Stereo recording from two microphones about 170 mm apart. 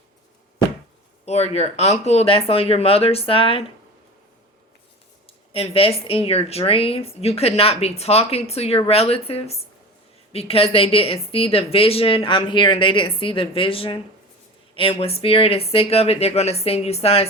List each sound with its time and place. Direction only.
1.2 s speech: 40° left (ahead or behind)
5.2 s speech: 35° left (ahead or behind)